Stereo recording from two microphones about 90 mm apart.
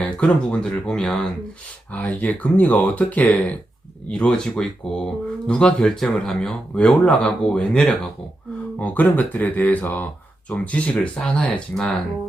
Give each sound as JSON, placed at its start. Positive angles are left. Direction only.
{"t": 0.0, "sound": "speech", "side_deg": 10}